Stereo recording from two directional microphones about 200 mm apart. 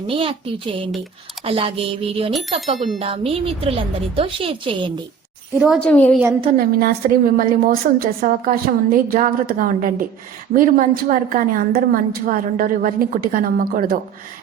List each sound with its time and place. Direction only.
0.1 s a woman's voice: 25° right (ahead or behind)
2.7 s a woman's voice: centre (ahead or behind)
3.0 s a woman's voice: 30° right (ahead or behind)
5.5 s a woman's voice: 5° right (ahead or behind)
6.6 s a woman's voice: 50° right (ahead or behind)